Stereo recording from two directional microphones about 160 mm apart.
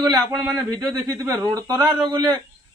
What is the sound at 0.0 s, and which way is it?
Speech, 25° right (ahead or behind).